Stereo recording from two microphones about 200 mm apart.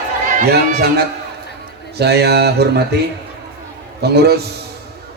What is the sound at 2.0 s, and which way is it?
A man's voice, 55° right (ahead or behind).